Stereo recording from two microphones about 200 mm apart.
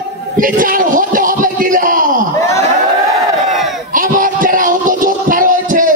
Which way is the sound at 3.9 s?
40° right (ahead or behind).